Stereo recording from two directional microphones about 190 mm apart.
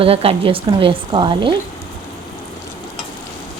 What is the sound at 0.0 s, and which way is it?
Frying, 30° right (ahead or behind).